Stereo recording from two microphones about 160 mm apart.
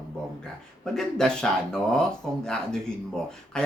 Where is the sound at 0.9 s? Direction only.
5° left (ahead or behind).